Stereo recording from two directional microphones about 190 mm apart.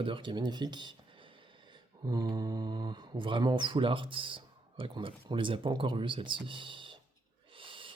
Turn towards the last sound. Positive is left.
turn(degrees=-25)  # may be behind; listen again after turning